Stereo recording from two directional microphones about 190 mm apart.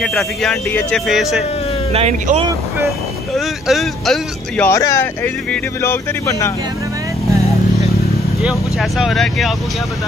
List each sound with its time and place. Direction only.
0.0 s speech: centre (ahead or behind)
1.9 s speech: 35° right (ahead or behind)
3.3 s speech: centre (ahead or behind)
4.6 s speech: 15° left (ahead or behind)
8.4 s speech: centre (ahead or behind)